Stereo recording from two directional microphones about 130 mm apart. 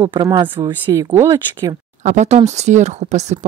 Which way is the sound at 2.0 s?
65° right (ahead or behind).